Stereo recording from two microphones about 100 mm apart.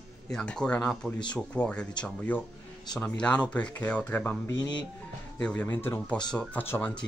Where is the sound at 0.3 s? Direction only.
5° left (ahead or behind).